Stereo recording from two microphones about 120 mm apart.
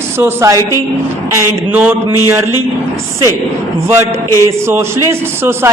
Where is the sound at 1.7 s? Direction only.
15° right (ahead or behind).